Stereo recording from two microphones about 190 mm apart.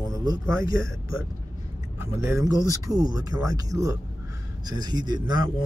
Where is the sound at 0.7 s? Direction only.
90° left.